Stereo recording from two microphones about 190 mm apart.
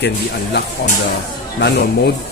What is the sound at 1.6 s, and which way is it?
Speech, 60° left (ahead or behind).